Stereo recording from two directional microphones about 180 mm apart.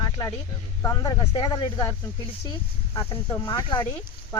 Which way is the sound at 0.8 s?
20° left (ahead or behind).